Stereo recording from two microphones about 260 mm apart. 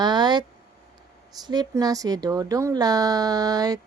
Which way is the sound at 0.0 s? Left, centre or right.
Centre.